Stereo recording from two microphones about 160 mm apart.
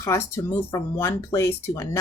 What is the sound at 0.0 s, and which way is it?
Speech, 20° left (ahead or behind).